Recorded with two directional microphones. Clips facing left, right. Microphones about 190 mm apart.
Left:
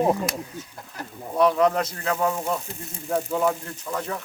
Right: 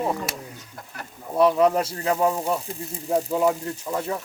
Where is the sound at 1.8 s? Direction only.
30° right (ahead or behind).